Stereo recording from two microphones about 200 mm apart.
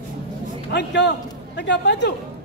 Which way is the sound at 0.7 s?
60° left (ahead or behind).